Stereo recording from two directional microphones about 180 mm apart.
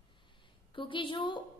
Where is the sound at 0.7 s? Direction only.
30° left (ahead or behind).